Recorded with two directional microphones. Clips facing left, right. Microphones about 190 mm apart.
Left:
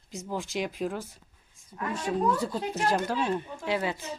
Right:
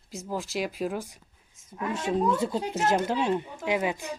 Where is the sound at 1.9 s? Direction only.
25° right (ahead or behind).